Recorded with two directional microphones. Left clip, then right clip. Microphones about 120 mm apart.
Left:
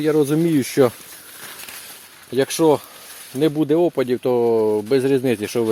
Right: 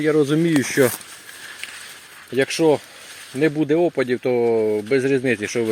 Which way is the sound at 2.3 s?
30° left (ahead or behind).